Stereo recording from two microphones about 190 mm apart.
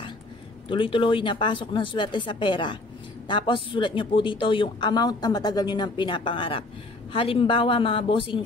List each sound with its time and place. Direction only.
0.7 s speech: 25° left (ahead or behind)